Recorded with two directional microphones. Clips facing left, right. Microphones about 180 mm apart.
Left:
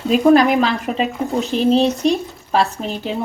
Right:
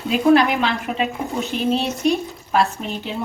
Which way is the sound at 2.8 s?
35° left (ahead or behind).